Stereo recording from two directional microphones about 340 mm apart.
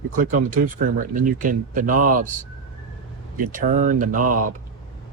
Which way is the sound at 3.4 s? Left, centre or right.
Right.